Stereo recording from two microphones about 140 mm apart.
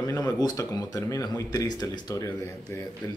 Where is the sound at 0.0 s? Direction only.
25° left (ahead or behind).